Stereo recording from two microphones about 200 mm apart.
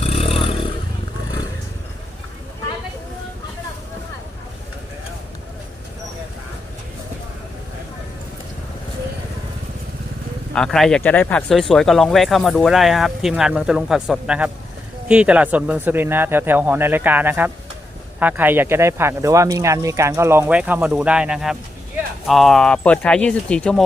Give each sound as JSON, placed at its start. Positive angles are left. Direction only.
{"t": 0.0, "sound": "vehicle", "side_deg": 30}
{"t": 10.5, "sound": "speech", "side_deg": 5}